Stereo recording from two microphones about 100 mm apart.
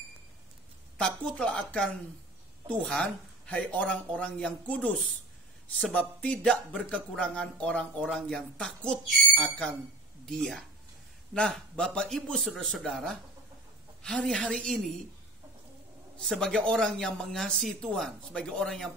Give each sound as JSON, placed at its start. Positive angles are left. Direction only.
{"t": 0.9, "sound": "a man's voice", "side_deg": 10}
{"t": 16.2, "sound": "a man's voice", "side_deg": 5}